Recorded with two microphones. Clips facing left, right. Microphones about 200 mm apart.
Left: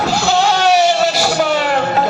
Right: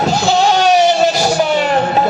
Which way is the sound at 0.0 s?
20° right (ahead or behind).